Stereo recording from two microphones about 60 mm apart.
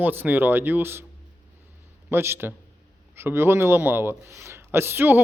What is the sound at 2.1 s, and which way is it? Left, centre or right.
A man's voice, right.